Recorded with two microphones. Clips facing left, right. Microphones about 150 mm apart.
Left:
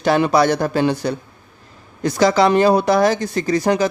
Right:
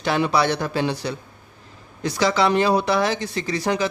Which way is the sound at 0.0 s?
45° left (ahead or behind).